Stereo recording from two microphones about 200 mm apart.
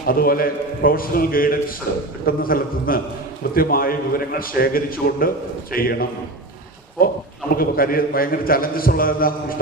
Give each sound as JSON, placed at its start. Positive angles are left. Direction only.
{"t": 0.0, "sound": "a man's voice", "side_deg": 45}